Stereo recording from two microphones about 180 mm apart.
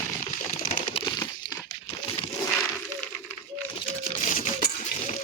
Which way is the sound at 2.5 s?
5° left (ahead or behind).